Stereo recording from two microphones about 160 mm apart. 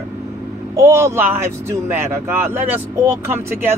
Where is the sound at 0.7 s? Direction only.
15° right (ahead or behind).